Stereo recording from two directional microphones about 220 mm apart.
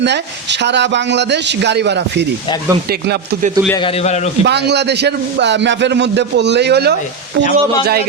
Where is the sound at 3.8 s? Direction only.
25° left (ahead or behind).